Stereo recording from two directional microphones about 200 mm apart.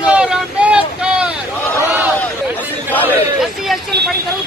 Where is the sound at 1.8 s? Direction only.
10° right (ahead or behind).